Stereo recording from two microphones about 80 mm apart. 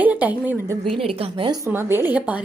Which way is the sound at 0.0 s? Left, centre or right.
Centre.